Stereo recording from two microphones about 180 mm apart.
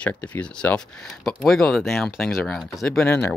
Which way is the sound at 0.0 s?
5° left (ahead or behind).